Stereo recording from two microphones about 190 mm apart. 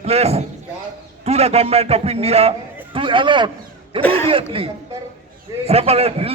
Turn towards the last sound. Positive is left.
turn(degrees=-30)  # may be behind; listen again after turning